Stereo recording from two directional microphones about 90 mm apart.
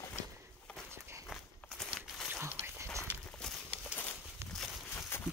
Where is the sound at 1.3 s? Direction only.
5° left (ahead or behind).